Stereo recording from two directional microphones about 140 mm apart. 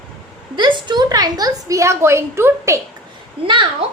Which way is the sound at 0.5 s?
35° right (ahead or behind).